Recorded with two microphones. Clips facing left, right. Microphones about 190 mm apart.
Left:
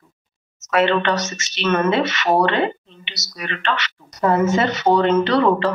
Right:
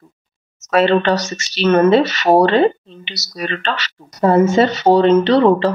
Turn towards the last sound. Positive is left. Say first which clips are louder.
# right 4 dB
turn(degrees=-30)  # may be behind; listen again after turning